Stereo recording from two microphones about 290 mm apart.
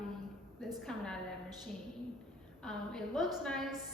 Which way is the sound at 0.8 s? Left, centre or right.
Centre.